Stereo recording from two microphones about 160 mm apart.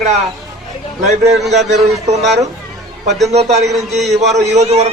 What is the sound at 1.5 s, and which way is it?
Speech, 45° right (ahead or behind).